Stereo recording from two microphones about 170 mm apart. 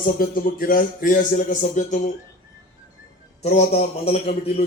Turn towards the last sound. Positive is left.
turn(degrees=40)  # may be behind; listen again after turning